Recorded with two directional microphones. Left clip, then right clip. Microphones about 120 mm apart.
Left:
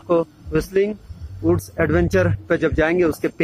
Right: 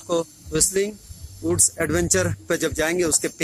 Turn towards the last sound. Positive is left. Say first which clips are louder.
# left 4 dB
turn(degrees=-15)  # may be behind; listen again after turning